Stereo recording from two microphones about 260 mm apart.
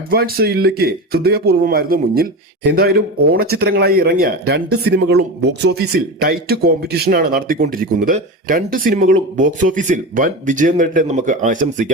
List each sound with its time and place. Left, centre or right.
0.1 s speech: right